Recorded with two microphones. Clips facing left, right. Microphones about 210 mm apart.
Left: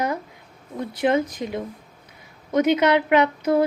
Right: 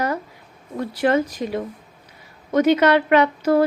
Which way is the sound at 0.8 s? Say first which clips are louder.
Right 2 dB; 20° left (ahead or behind).